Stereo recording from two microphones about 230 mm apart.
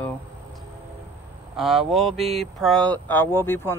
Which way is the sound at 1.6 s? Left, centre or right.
Centre.